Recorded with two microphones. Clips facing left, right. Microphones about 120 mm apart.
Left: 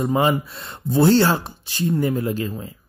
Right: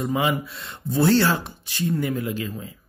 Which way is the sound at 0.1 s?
40° left (ahead or behind).